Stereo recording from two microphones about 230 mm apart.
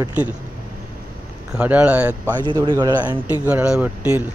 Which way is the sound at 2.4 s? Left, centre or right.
Centre.